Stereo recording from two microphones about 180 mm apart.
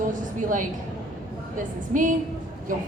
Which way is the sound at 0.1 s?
45° right (ahead or behind).